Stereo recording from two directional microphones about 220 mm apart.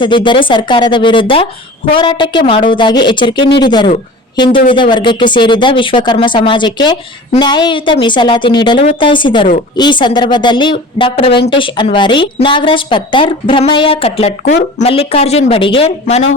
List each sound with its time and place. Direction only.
0.0 s a woman's voice: 20° left (ahead or behind)